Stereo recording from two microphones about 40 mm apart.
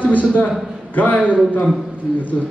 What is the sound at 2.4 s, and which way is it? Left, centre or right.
Speech, centre.